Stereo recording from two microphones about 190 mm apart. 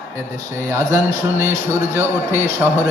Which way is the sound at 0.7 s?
15° right (ahead or behind).